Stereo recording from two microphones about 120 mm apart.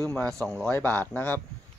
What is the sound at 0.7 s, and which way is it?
Speech, 15° left (ahead or behind).